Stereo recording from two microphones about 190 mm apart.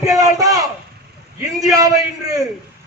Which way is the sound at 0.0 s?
20° right (ahead or behind).